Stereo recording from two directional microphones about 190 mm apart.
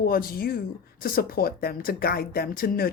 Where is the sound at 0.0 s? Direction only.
50° left (ahead or behind).